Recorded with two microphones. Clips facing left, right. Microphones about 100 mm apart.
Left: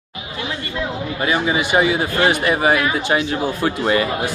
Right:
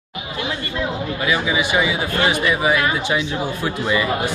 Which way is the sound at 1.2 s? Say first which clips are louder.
Left 2 dB; 40° left (ahead or behind).